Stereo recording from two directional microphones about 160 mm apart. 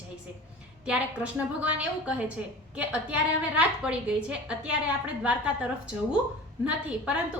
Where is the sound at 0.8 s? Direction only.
5° right (ahead or behind).